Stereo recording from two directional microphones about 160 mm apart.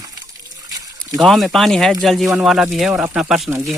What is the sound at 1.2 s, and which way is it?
Speech, centre (ahead or behind).